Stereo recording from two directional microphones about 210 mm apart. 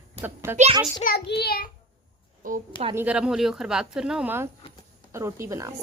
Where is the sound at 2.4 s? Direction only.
40° right (ahead or behind).